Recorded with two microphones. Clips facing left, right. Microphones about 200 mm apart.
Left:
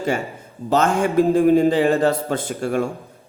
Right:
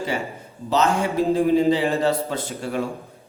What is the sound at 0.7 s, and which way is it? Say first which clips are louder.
A man's voice: left 3 dB; 50° left (ahead or behind).